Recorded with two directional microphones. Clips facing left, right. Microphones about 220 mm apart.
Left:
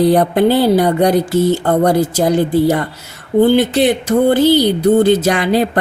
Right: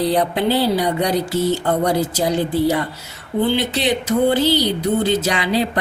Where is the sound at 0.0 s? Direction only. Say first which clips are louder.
Left 7 dB; 50° left (ahead or behind).